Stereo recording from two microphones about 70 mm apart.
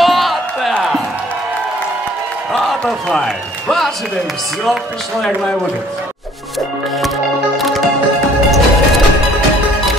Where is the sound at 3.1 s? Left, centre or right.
Centre.